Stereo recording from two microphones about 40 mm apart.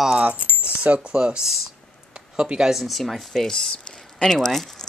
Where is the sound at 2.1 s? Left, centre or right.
Right.